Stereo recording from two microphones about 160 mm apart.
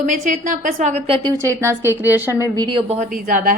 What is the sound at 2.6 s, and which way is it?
Speech, 30° right (ahead or behind).